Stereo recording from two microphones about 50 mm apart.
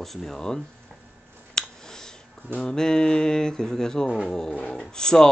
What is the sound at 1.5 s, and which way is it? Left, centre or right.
Finger snapping, centre.